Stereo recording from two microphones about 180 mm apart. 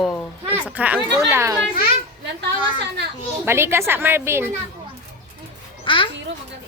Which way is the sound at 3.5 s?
15° right (ahead or behind).